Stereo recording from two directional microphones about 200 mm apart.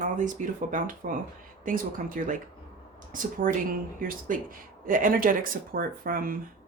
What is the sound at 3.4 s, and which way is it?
Speech, 45° right (ahead or behind).